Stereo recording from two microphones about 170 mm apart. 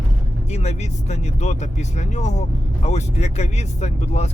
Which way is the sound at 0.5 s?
40° left (ahead or behind).